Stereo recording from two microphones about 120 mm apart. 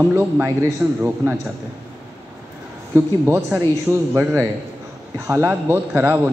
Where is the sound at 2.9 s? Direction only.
20° right (ahead or behind).